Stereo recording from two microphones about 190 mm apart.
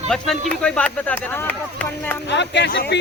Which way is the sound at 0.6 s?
5° left (ahead or behind).